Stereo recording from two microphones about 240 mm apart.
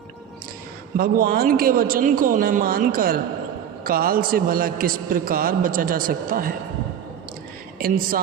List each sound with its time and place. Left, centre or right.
0.9 s a man's voice: right
7.8 s a woman's voice: right